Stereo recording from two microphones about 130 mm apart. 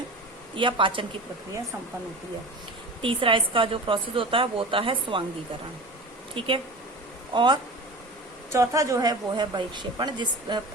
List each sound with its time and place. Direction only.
0.5 s a woman's voice: 40° right (ahead or behind)
3.0 s a woman's voice: 40° right (ahead or behind)
6.4 s a woman's voice: 45° right (ahead or behind)
8.5 s a woman's voice: 25° right (ahead or behind)